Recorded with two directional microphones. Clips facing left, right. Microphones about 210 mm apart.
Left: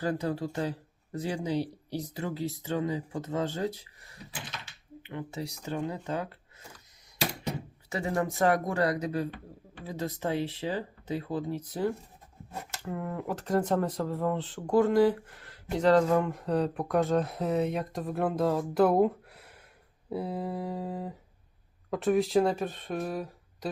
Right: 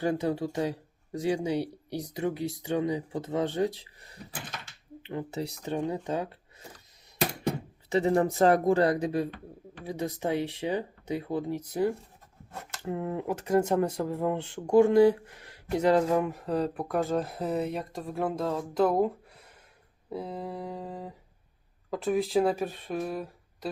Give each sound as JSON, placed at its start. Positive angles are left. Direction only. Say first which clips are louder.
{"t": 0.1, "sound": "speech", "louder": "right 2 dB", "side_deg": -15}
{"t": 5.6, "sound": "speech", "louder": "right 3 dB", "side_deg": -20}
{"t": 7.9, "sound": "speech", "louder": "right 6 dB", "side_deg": -30}
{"t": 13.4, "sound": "speech", "louder": "right 2 dB", "side_deg": -10}